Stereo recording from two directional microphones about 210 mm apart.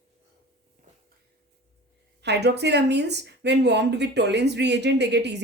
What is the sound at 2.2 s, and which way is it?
Speech, 55° right (ahead or behind).